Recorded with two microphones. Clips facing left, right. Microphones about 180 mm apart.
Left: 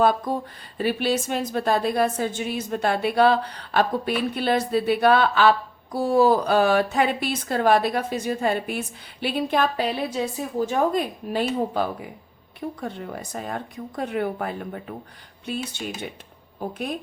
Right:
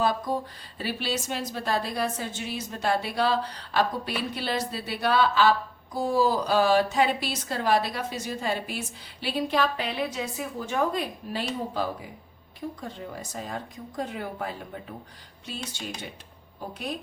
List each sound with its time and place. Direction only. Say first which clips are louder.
0.0 s a woman's voice: left 5 dB; 55° left (ahead or behind)
12.5 s a woman's voice: left 5 dB; 65° left (ahead or behind)
16.6 s a woman's voice: left 5 dB; 50° left (ahead or behind)